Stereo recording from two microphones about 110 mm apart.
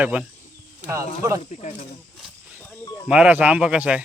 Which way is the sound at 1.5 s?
90° left.